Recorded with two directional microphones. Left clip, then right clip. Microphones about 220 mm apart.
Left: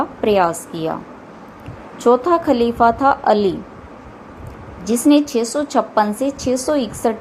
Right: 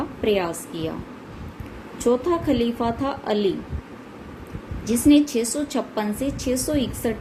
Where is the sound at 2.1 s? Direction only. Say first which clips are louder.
Left 7 dB; 15° left (ahead or behind).